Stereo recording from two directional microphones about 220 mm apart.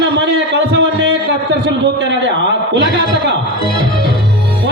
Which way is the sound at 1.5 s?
50° right (ahead or behind).